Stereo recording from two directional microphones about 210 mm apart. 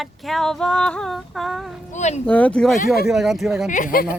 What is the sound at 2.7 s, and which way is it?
Speech, 45° left (ahead or behind).